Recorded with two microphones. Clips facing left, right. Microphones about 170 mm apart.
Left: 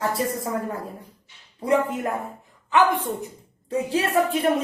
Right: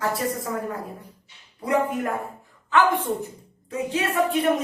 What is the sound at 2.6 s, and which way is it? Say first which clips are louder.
Speech: left 1 dB; 15° left (ahead or behind).